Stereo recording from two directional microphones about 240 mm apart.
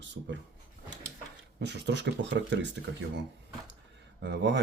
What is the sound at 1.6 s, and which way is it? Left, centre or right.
Speech, right.